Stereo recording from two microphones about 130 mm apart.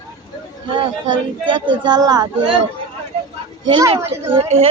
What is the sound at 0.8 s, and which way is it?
Speech, 40° right (ahead or behind).